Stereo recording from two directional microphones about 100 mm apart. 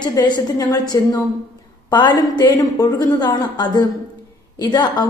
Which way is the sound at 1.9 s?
50° left (ahead or behind).